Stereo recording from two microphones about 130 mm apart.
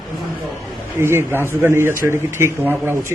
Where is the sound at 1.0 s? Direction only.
20° right (ahead or behind).